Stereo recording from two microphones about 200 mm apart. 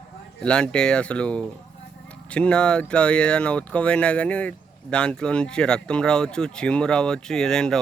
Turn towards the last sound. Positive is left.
turn(degrees=5)  # may be behind; listen again after turning